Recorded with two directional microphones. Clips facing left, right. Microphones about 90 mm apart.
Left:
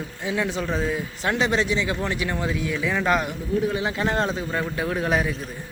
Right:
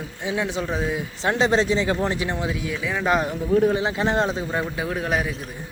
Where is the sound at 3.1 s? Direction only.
20° right (ahead or behind).